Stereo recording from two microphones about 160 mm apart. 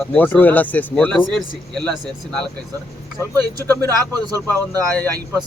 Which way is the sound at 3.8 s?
25° right (ahead or behind).